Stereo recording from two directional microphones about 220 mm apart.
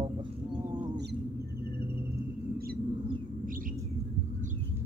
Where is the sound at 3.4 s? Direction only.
40° right (ahead or behind).